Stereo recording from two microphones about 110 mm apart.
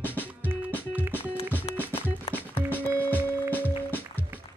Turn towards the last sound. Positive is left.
turn(degrees=15)  # may be behind; listen again after turning